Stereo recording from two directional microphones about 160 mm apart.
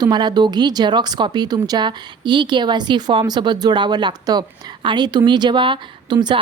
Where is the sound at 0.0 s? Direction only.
25° right (ahead or behind).